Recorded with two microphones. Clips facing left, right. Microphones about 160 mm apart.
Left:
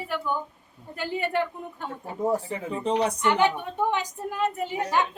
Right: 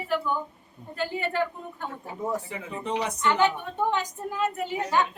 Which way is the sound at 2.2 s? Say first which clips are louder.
Left 5 dB; 30° left (ahead or behind).